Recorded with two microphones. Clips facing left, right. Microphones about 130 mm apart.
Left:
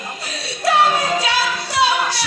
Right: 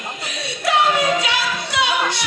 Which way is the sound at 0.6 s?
20° right (ahead or behind).